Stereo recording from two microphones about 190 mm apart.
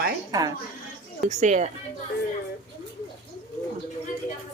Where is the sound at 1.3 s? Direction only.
40° right (ahead or behind).